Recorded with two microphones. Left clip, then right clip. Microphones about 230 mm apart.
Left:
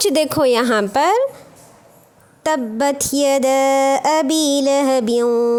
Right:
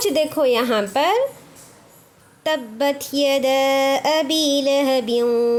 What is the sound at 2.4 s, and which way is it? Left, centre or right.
A woman's voice, left.